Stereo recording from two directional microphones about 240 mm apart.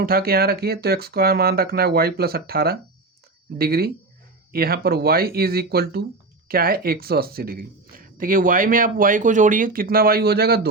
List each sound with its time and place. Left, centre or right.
0.0 s speech: right